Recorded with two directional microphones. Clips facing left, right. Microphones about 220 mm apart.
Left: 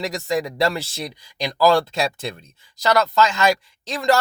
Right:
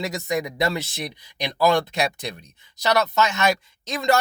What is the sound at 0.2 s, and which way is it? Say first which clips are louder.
Speech: left 4 dB; 20° right (ahead or behind).